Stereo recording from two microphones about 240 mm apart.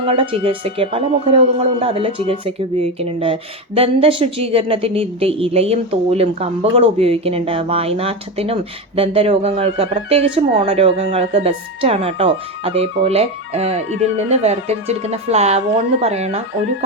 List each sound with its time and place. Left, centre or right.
0.0 s speech: right